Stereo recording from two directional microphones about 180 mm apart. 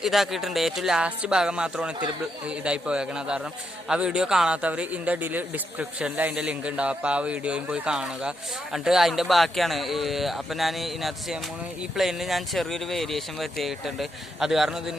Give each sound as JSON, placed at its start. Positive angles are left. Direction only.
{"t": 0.0, "sound": "a man's voice", "side_deg": 0}